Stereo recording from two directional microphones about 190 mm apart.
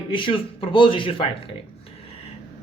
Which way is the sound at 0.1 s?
25° left (ahead or behind).